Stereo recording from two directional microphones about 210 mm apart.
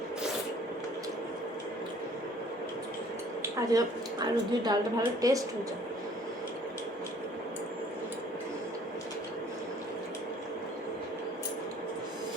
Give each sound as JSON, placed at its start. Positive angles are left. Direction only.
{"t": 3.4, "sound": "a woman's voice", "side_deg": -15}